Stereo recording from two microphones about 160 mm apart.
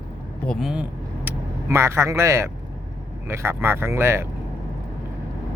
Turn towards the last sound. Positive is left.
turn(degrees=-15)  # may be behind; listen again after turning